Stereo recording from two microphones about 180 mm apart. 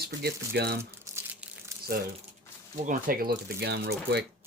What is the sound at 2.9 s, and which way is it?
Speech, 50° right (ahead or behind).